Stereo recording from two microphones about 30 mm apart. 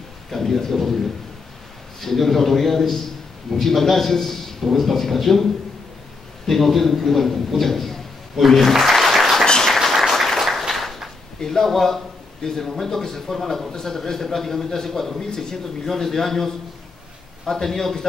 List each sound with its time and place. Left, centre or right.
0.3 s speech: centre
2.0 s a man's voice: centre
8.4 s applause: centre
9.5 s a sound: centre
9.8 s applause: centre
10.7 s a sound: centre
11.3 s speech: centre
15.1 s speech: centre